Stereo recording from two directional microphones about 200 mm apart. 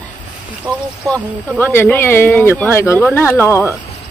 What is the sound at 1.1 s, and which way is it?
Speech, 5° left (ahead or behind).